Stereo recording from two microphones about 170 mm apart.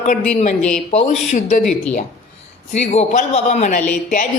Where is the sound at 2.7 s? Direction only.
40° left (ahead or behind).